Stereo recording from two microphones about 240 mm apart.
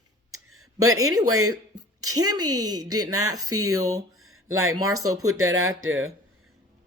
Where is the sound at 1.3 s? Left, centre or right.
Right.